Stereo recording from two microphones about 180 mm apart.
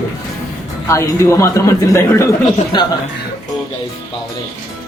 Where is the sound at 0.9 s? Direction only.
15° left (ahead or behind).